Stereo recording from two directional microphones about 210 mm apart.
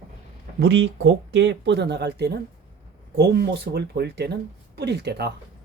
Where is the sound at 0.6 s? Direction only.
55° right (ahead or behind).